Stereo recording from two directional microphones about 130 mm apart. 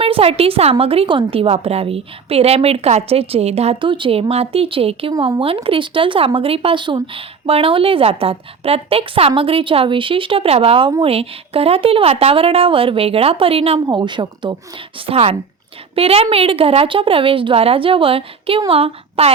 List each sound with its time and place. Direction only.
0.0 s speech: 50° right (ahead or behind)
13.7 s a woman's voice: 35° right (ahead or behind)